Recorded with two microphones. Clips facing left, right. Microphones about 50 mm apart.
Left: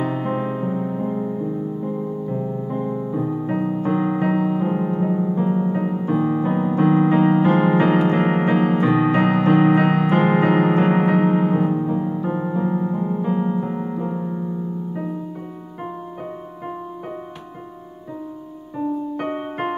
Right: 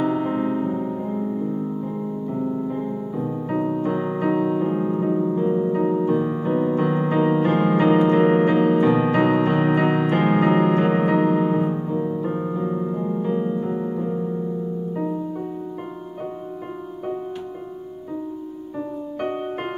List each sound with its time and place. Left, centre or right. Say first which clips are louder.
0.0 s music: right 1 dB; centre
2.7 s music: left 2 dB; centre